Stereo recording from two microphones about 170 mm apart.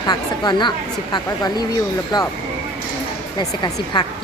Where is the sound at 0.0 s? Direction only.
25° left (ahead or behind).